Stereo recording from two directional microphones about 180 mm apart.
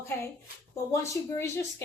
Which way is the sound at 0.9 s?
15° left (ahead or behind).